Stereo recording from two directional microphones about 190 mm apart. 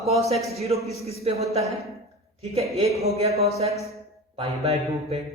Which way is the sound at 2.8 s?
35° right (ahead or behind).